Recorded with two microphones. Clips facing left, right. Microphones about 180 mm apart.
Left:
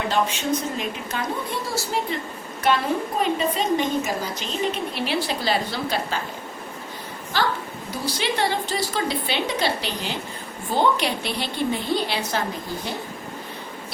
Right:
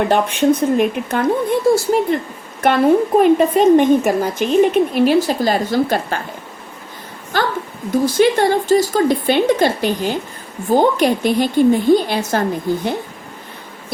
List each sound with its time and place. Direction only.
0.1 s speech: 55° right (ahead or behind)
3.2 s a woman's voice: 55° right (ahead or behind)
7.3 s a sound: 50° right (ahead or behind)
7.9 s a woman's voice: 50° right (ahead or behind)